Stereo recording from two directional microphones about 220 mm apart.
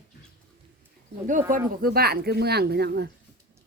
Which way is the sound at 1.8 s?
45° right (ahead or behind).